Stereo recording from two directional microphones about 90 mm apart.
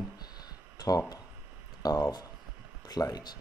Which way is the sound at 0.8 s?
40° left (ahead or behind).